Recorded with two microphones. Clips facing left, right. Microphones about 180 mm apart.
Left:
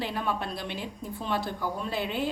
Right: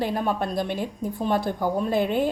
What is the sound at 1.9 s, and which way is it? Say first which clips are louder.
Speech: right 7 dB; 50° right (ahead or behind).